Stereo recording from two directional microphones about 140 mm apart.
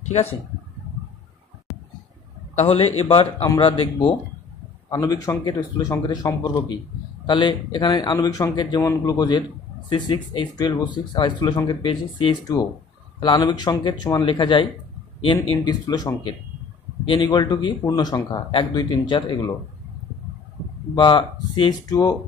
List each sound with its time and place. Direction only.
2.5 s a man's voice: 45° left (ahead or behind)
4.8 s a man's voice: 25° left (ahead or behind)
20.9 s a man's voice: 35° left (ahead or behind)